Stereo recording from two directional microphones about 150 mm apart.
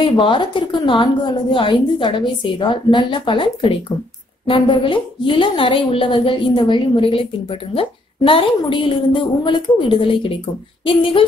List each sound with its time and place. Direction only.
0.0 s a woman's voice: 35° left (ahead or behind)